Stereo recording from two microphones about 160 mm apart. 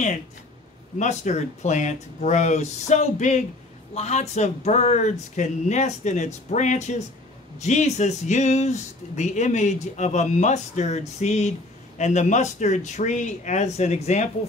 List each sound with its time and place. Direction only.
0.9 s speech: 45° left (ahead or behind)